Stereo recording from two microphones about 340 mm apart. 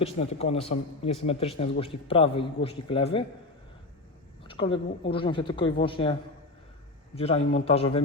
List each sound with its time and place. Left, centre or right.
0.0 s a woman's voice: centre
4.4 s a woman's voice: centre
7.2 s a woman's voice: centre